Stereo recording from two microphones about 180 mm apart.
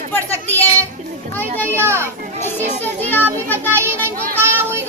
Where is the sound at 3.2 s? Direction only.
10° right (ahead or behind).